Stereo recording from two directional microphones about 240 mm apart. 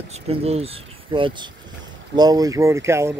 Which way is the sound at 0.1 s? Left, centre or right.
Right.